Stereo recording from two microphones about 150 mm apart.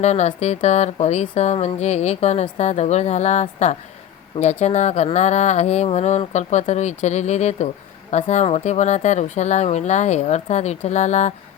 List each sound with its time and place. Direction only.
0.0 s speech: 50° left (ahead or behind)